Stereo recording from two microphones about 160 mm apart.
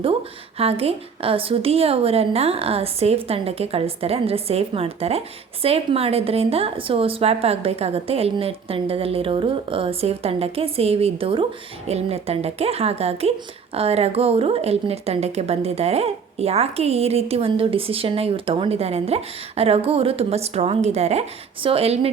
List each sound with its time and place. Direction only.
0.6 s a woman's voice: 40° right (ahead or behind)